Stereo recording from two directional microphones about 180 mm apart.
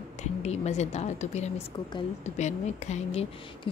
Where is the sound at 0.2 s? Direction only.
40° left (ahead or behind).